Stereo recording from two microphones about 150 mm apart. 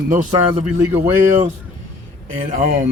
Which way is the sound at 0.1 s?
60° right (ahead or behind).